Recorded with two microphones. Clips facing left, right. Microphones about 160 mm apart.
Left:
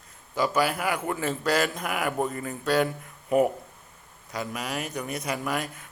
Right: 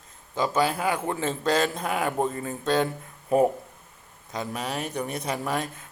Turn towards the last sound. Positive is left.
turn(degrees=-25)  # may be behind; listen again after turning